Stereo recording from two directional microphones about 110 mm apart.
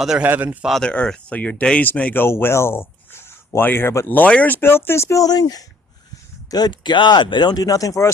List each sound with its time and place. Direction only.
0.0 s a man's voice: 5° right (ahead or behind)
0.7 s speech: 5° left (ahead or behind); by 8.1 s 30° left (ahead or behind)